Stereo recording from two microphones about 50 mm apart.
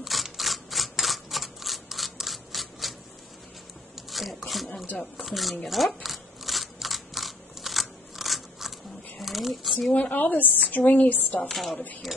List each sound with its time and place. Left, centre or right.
0.0 s camera: centre
3.9 s a sound: centre
5.1 s speech: centre
6.0 s scissors: centre
9.2 s a sound: centre
9.9 s a woman's voice: left
11.4 s speech: centre